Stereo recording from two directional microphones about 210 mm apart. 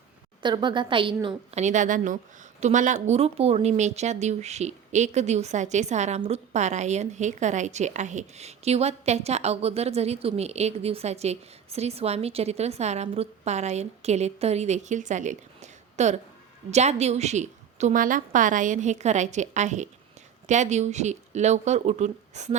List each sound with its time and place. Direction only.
0.4 s a woman's voice: 20° right (ahead or behind)